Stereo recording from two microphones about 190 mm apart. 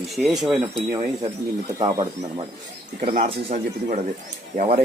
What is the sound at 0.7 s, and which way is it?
Speech, 30° right (ahead or behind).